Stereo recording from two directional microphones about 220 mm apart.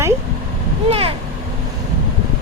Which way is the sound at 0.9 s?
25° right (ahead or behind).